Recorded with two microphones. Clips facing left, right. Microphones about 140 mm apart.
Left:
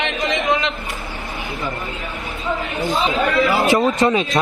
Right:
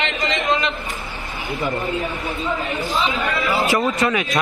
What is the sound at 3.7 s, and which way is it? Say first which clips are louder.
Speech: left 4 dB; 30° left (ahead or behind).